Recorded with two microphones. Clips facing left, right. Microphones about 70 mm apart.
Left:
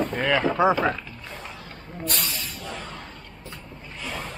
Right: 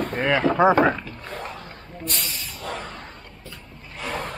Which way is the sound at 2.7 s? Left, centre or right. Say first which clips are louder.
Right 2 dB; centre.